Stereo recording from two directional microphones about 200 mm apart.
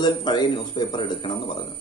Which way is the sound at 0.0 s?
25° left (ahead or behind).